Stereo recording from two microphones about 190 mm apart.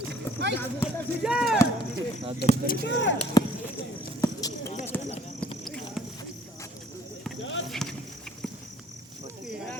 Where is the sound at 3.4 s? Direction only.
20° left (ahead or behind).